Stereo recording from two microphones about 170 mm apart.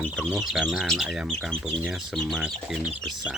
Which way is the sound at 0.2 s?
5° right (ahead or behind).